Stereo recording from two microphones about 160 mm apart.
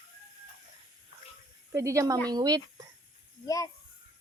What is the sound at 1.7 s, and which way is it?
Speech, 20° right (ahead or behind).